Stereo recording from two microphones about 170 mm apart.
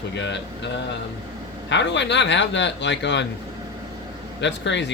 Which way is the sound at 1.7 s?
90° left.